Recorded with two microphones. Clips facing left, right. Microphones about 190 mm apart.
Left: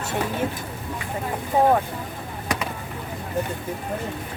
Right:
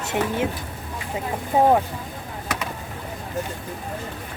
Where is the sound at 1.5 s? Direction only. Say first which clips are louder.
Right 1 dB; 15° right (ahead or behind).